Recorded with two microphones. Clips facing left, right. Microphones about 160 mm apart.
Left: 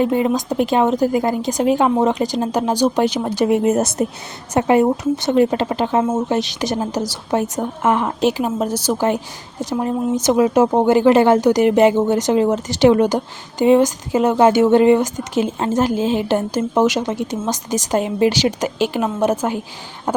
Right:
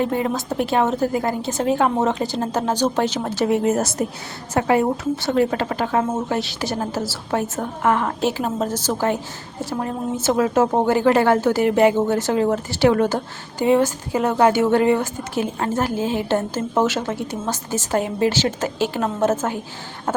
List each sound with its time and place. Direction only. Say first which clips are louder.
0.0 s a woman's voice: left 5 dB; 20° left (ahead or behind)